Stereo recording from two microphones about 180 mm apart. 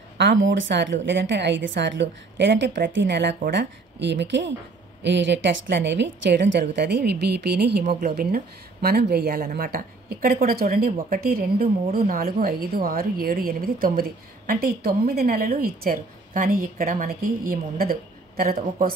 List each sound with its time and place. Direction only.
0.2 s speech: 80° right
1.0 s a woman's voice: 75° right (ahead or behind); by 18.9 s 55° right (ahead or behind)